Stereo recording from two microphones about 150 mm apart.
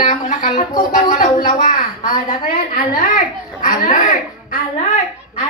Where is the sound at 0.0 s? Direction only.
60° left (ahead or behind).